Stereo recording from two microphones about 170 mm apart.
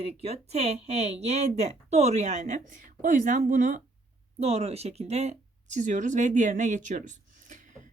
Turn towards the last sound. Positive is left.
turn(degrees=-45)  # may be behind; listen again after turning